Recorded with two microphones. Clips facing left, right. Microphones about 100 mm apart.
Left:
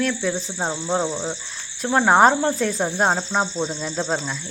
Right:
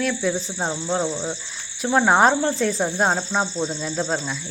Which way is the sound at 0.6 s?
10° left (ahead or behind).